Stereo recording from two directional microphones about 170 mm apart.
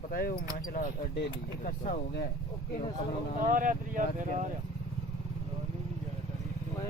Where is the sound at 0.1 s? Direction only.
60° left (ahead or behind).